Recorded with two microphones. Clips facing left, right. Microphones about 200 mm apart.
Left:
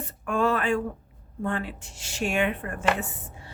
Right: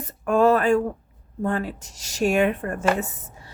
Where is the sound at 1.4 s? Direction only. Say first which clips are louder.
Right 4 dB; 40° right (ahead or behind).